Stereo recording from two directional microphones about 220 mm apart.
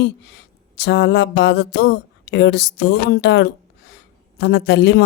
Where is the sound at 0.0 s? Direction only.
55° left (ahead or behind).